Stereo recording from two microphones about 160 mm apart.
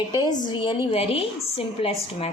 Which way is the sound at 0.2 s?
25° left (ahead or behind).